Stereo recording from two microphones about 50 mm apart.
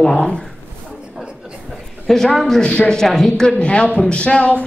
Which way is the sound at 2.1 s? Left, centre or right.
Centre.